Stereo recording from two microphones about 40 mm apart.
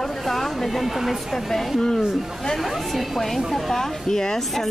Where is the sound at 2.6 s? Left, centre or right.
Centre.